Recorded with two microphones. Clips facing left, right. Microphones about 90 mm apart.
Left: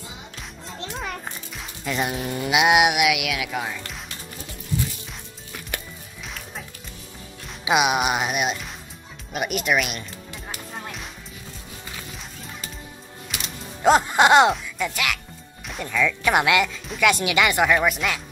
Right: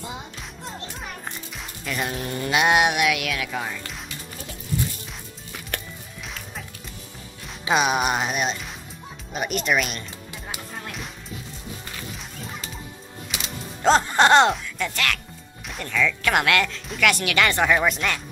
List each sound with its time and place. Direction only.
1.9 s insect: 20° left (ahead or behind)
2.1 s music: 5° left (ahead or behind)
6.2 s music: centre (ahead or behind)
7.6 s music: 10° left (ahead or behind)
9.3 s speech: 5° left (ahead or behind)
13.8 s music: 10° left (ahead or behind)
14.5 s speech: 10° left (ahead or behind)
15.6 s music: 5° left (ahead or behind)
17.6 s speech: 5° left (ahead or behind)